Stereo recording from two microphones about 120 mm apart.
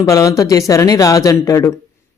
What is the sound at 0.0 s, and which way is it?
A man's voice, 25° left (ahead or behind).